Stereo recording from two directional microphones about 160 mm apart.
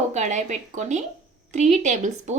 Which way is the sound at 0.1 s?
45° right (ahead or behind).